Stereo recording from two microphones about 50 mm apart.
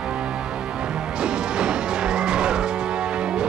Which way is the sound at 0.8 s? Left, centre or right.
Centre.